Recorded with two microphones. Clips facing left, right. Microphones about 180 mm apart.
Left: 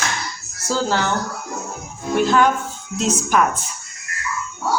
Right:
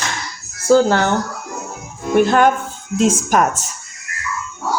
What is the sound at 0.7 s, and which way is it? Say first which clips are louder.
Speech: right 9 dB; 55° right (ahead or behind).